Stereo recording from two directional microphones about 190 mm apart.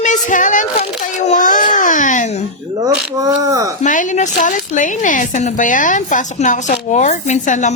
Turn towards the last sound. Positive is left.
turn(degrees=40)  # may be behind; listen again after turning